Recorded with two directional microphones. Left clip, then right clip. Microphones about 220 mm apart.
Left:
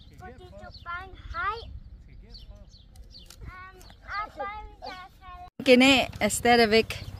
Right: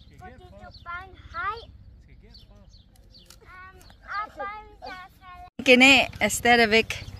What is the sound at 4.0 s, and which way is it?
Roaring cats, 10° right (ahead or behind).